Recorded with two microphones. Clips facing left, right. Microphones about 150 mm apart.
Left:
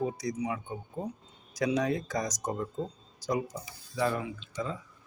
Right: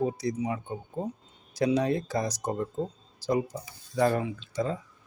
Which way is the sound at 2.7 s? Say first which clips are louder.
Right 3 dB; 30° right (ahead or behind).